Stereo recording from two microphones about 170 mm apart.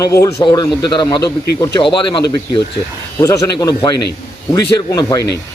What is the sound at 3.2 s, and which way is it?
Speech, 20° left (ahead or behind).